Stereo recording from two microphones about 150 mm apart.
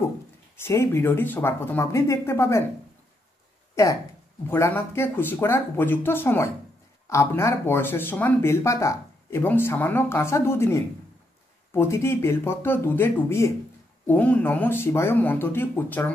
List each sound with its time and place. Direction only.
0.7 s speech: 15° left (ahead or behind)
4.5 s speech: 15° left (ahead or behind)